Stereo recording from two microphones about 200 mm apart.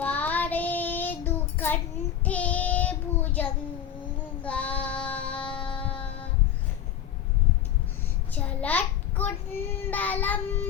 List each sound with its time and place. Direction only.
0.0 s child singing: 10° left (ahead or behind)
4.4 s child singing: 5° left (ahead or behind)
8.3 s child singing: 5° left (ahead or behind)